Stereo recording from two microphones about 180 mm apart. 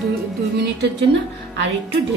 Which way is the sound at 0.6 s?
70° right (ahead or behind).